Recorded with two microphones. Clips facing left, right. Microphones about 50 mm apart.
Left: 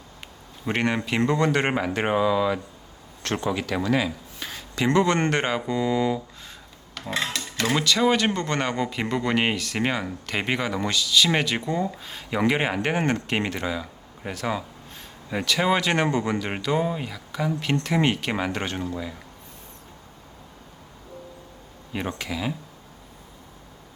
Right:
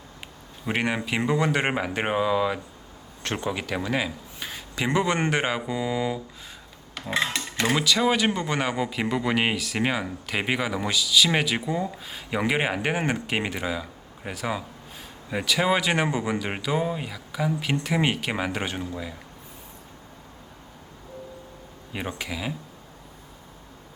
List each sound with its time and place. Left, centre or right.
0.6 s speech: centre
7.1 s a sound: centre
7.7 s speech: centre
22.1 s speech: centre